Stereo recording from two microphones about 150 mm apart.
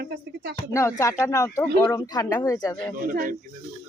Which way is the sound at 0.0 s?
90° right.